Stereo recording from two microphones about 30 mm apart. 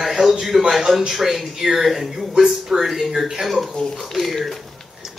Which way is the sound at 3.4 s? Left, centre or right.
Centre.